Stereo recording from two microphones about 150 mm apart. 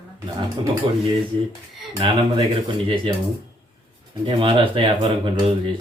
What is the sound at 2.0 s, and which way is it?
Speech, 35° right (ahead or behind).